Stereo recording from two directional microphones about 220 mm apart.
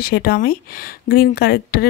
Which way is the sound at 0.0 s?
40° left (ahead or behind).